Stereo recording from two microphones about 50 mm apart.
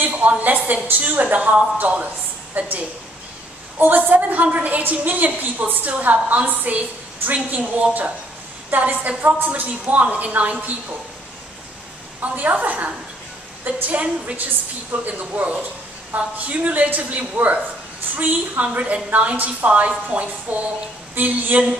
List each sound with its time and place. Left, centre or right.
0.0 s a woman's voice: right
3.7 s a woman's voice: right
12.2 s a woman's voice: right